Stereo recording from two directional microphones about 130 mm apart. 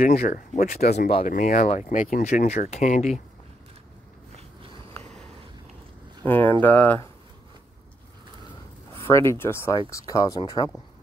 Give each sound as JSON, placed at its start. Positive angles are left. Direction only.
{"t": 0.0, "sound": "speech", "side_deg": 90}
{"t": 1.9, "sound": "speech", "side_deg": 85}
{"t": 6.2, "sound": "speech", "side_deg": 15}
{"t": 8.9, "sound": "speech", "side_deg": 20}